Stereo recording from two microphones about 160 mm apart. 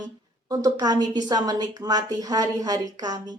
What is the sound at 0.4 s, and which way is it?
A woman's voice, 25° right (ahead or behind).